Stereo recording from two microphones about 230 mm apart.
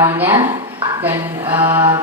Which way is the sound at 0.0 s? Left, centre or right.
Centre.